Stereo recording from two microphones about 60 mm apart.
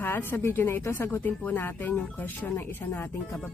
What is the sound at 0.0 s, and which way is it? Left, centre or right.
Speech, left.